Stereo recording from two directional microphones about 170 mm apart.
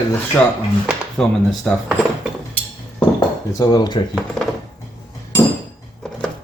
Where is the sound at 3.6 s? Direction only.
25° left (ahead or behind).